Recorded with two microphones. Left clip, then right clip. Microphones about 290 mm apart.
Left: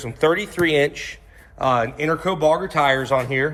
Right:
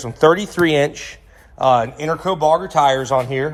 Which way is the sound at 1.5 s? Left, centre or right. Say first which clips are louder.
Right 4 dB; centre.